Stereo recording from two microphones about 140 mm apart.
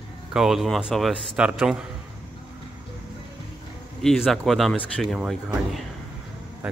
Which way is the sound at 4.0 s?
5° left (ahead or behind).